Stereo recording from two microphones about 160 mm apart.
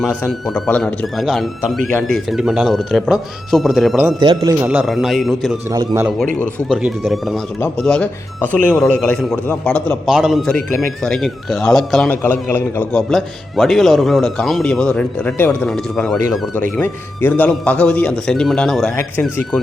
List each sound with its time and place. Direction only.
0.0 s a man's voice: centre (ahead or behind)
4.2 s speech: 25° right (ahead or behind)
4.6 s a man's voice: 10° right (ahead or behind)
6.7 s a man's voice: 5° right (ahead or behind)
10.1 s a man's voice: 5° right (ahead or behind)
12.1 s a man's voice: 15° left (ahead or behind)
16.7 s a man's voice: 15° left (ahead or behind)